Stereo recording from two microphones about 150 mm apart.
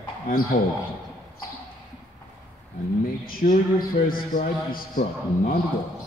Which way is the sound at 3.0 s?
70° left (ahead or behind).